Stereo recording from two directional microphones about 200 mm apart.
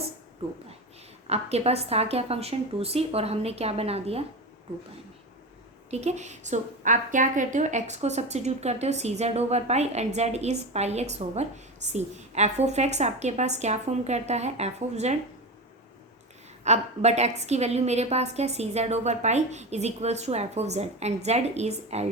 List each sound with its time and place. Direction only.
1.3 s a woman's voice: 30° right (ahead or behind)
5.9 s a woman's voice: 35° right (ahead or behind)
16.6 s a woman's voice: 35° right (ahead or behind)